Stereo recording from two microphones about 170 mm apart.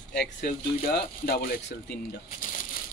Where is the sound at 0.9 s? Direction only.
65° left (ahead or behind).